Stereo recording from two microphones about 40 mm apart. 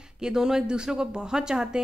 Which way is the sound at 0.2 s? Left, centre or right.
Centre.